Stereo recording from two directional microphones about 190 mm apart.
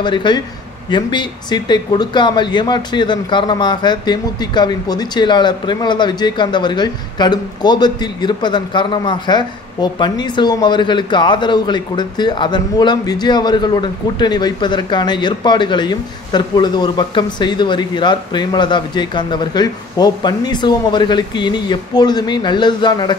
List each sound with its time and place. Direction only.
0.0 s speech: 25° left (ahead or behind)